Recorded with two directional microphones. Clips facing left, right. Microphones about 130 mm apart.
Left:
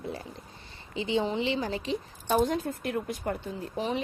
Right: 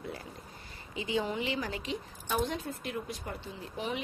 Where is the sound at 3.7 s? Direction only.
35° left (ahead or behind).